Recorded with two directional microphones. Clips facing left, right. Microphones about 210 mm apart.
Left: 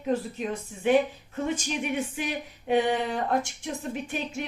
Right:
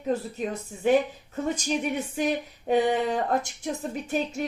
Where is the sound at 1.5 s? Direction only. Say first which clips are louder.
Right 3 dB; 40° right (ahead or behind).